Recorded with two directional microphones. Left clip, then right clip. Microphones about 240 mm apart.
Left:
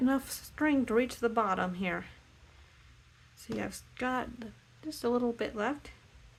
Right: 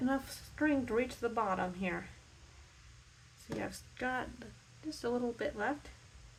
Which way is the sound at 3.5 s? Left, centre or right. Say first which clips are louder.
Left 3 dB; left.